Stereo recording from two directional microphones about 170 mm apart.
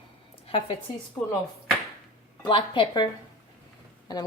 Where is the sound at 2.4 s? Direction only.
30° left (ahead or behind).